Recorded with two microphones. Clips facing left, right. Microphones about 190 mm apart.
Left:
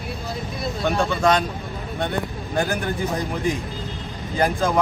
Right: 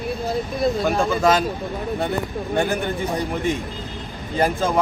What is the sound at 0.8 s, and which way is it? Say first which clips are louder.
Speech: left 3 dB; centre (ahead or behind).